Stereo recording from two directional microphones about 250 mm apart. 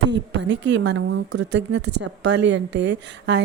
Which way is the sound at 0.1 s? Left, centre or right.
Right.